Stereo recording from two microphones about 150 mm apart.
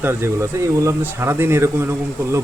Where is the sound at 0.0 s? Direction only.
15° right (ahead or behind).